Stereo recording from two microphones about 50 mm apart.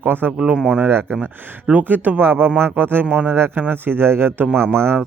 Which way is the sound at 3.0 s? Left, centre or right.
Right.